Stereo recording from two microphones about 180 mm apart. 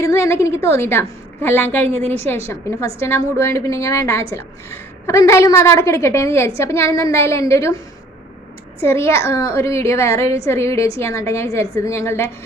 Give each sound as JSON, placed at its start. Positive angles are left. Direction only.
{"t": 0.0, "sound": "a woman's voice", "side_deg": 15}
{"t": 8.8, "sound": "a woman's voice", "side_deg": 15}